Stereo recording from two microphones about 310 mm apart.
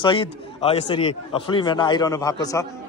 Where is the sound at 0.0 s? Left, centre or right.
Centre.